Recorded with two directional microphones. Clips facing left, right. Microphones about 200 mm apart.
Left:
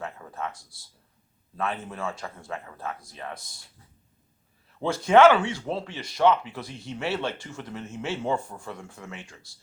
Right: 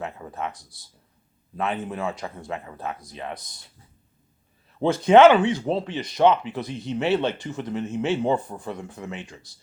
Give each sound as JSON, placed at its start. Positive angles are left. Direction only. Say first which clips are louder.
{"t": 0.0, "sound": "speech", "louder": "right 3 dB", "side_deg": -20}
{"t": 4.8, "sound": "speech", "louder": "right 4 dB", "side_deg": -20}